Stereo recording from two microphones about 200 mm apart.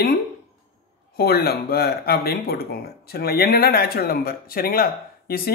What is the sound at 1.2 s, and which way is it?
Speech, 50° left (ahead or behind).